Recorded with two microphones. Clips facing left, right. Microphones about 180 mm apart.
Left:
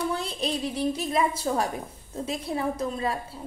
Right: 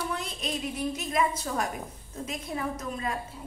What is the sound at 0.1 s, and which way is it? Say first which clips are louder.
A woman's voice: left 4 dB; 30° left (ahead or behind).